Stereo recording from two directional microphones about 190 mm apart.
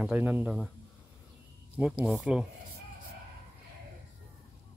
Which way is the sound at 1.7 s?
5° right (ahead or behind).